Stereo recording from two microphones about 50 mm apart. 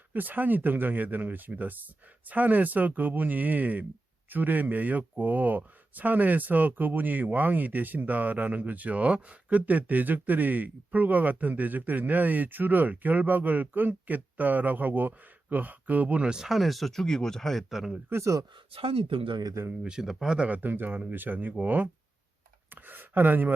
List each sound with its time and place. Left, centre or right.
0.1 s speech: right; by 16.5 s centre
16.5 s speech: centre
19.8 s speech: centre
20.3 s speech: right
20.6 s speech: right